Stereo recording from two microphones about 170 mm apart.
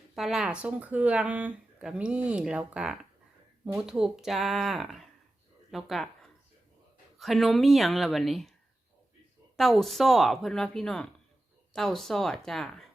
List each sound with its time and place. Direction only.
0.2 s a woman's voice: centre (ahead or behind)
9.6 s a woman's voice: centre (ahead or behind)